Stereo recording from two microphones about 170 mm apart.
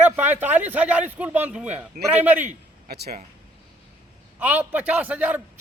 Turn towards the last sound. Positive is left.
turn(degrees=-10)  # may be behind; listen again after turning